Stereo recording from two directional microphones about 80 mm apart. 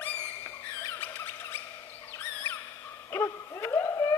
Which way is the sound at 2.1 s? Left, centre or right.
Left.